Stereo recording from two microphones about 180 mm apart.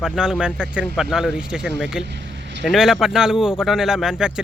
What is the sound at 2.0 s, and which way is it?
Vehicle, 75° right (ahead or behind).